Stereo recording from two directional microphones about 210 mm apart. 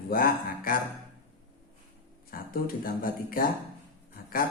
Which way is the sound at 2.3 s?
45° left (ahead or behind).